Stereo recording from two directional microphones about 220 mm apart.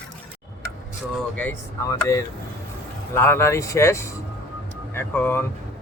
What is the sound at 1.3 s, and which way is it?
Speech, 10° left (ahead or behind).